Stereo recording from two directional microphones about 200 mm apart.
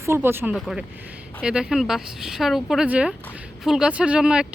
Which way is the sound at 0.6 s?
Centre (ahead or behind).